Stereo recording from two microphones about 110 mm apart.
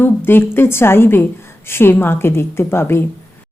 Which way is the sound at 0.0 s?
20° left (ahead or behind).